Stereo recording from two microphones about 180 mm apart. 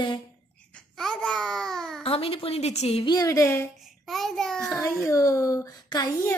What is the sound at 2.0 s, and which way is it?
A woman's voice, 30° left (ahead or behind).